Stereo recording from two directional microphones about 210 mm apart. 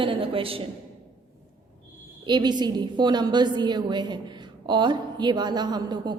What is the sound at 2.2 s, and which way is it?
A woman's voice, 20° right (ahead or behind).